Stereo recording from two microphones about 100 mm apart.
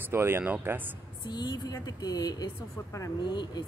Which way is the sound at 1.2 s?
45° left (ahead or behind).